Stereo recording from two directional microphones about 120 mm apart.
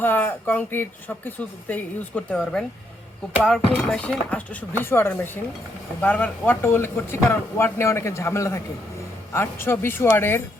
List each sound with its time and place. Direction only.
0.0 s speech: 15° left (ahead or behind)